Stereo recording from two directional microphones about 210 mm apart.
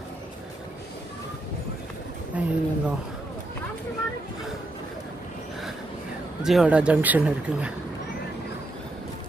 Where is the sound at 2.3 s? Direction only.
5° right (ahead or behind).